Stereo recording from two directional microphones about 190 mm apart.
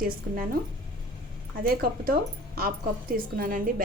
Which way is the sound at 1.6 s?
50° right (ahead or behind).